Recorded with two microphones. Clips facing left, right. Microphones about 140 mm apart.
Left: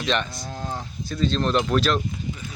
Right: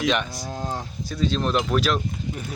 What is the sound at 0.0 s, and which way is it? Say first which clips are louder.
Speech: right 2 dB; 10° right (ahead or behind).